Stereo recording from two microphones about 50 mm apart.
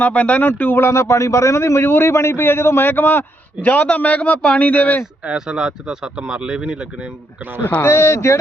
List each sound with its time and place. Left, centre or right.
0.0 s speech: left
0.8 s a man's voice: left
3.6 s a man's voice: left
5.2 s speech: centre
7.8 s a man's voice: left